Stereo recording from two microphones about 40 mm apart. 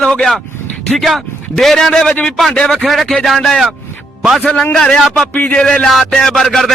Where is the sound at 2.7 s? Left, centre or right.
Centre.